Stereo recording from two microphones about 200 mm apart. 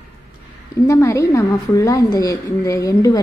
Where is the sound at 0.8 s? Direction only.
15° left (ahead or behind).